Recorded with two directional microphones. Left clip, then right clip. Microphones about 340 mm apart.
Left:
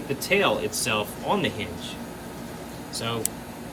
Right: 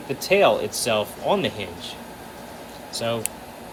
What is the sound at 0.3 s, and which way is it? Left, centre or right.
Speech, centre.